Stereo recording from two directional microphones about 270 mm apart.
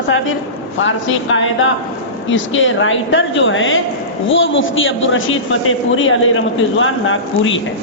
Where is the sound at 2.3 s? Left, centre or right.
Left.